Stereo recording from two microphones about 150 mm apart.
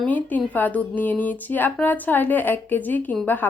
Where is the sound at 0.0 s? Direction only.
10° left (ahead or behind).